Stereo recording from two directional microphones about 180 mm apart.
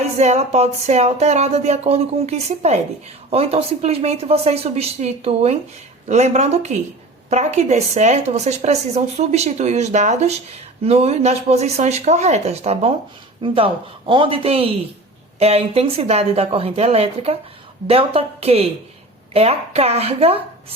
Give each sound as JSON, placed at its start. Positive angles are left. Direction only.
{"t": 0.2, "sound": "a woman's voice", "side_deg": -35}